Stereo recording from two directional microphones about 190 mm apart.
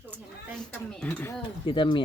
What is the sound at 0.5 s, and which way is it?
Speech, 5° left (ahead or behind).